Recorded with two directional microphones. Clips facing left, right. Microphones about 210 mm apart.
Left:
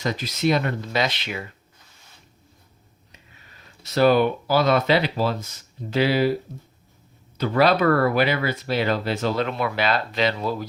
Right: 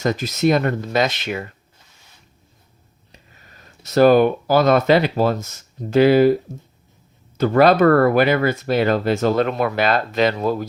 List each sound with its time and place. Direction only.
0.0 s speech: 45° right (ahead or behind)
3.1 s speech: 40° right (ahead or behind)
7.3 s speech: 50° right (ahead or behind)